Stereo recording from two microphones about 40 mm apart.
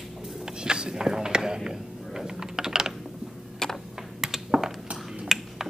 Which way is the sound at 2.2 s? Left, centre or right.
Centre.